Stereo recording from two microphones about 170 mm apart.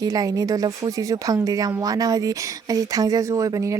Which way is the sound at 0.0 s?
20° right (ahead or behind).